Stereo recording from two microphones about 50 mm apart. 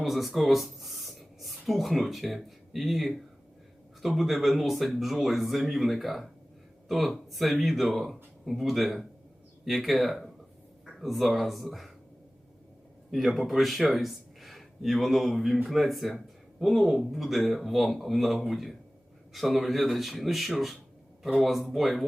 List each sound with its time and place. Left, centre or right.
0.0 s speech: centre
13.1 s speech: centre